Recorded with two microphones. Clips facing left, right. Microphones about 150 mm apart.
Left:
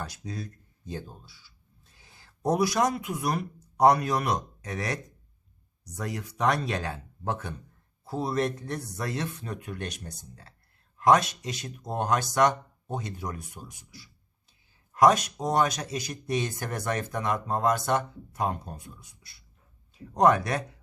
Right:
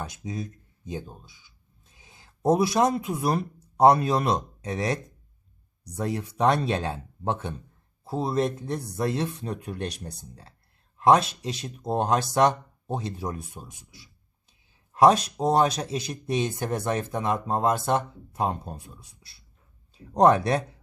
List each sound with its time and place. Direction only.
0.0 s speech: 20° right (ahead or behind)